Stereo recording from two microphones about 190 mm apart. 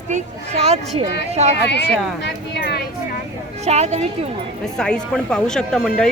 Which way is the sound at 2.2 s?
60° left (ahead or behind).